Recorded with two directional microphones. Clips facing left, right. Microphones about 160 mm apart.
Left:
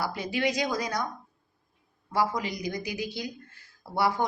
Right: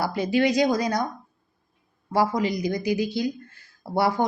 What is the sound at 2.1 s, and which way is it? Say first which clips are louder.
A woman's voice: right 6 dB; 30° right (ahead or behind).